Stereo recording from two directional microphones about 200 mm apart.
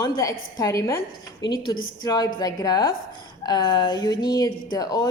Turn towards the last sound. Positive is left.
turn(degrees=20)  # may be behind; listen again after turning